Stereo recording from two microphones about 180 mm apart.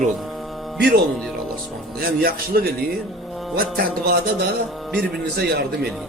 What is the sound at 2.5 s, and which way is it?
Speech, 60° right (ahead or behind).